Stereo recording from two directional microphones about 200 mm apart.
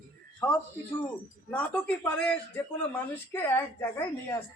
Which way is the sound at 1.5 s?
5° left (ahead or behind).